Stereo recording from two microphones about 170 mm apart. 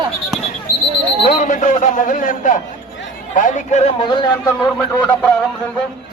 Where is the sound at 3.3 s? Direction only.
50° left (ahead or behind); by 4.5 s 25° left (ahead or behind).